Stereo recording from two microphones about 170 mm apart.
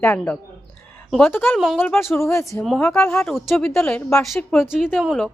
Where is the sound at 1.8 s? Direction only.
10° left (ahead or behind).